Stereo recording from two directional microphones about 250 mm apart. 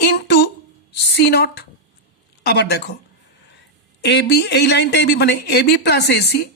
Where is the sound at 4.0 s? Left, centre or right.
Left.